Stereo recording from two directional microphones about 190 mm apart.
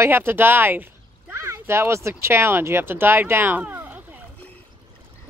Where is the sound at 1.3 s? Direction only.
15° right (ahead or behind).